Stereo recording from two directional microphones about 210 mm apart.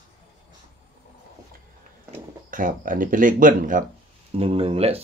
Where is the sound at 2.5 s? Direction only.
40° right (ahead or behind).